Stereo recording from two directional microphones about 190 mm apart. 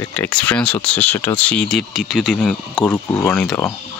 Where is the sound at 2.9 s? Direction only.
10° left (ahead or behind).